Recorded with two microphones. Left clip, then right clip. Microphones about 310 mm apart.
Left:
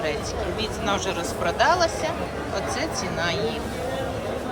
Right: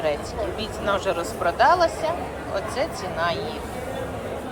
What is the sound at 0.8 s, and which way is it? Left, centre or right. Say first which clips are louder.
Speech: right 4 dB; centre.